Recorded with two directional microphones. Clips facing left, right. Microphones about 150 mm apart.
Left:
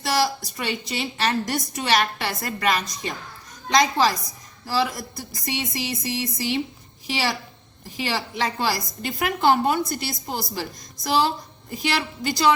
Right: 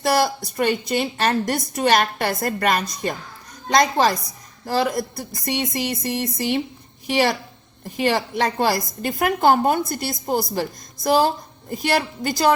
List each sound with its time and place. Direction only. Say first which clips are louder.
0.0 s a woman's voice: right 4 dB; 50° right (ahead or behind)